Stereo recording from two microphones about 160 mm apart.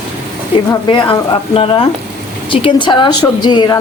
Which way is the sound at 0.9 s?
30° left (ahead or behind).